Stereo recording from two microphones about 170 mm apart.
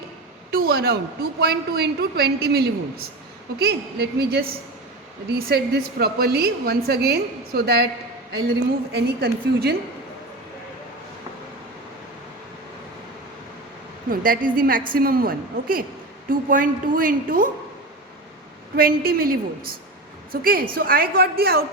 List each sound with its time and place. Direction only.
0.5 s a woman's voice: 65° right (ahead or behind)
8.9 s a woman's voice: 70° right (ahead or behind)
14.1 s a woman's voice: 55° right (ahead or behind)
18.8 s a woman's voice: 60° right (ahead or behind)